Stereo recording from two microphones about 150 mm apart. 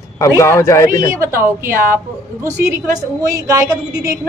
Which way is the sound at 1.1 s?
20° right (ahead or behind).